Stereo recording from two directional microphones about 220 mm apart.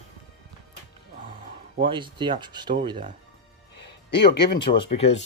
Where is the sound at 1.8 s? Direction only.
20° right (ahead or behind).